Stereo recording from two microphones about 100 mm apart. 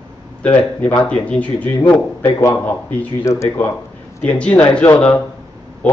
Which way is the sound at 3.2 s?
30° left (ahead or behind).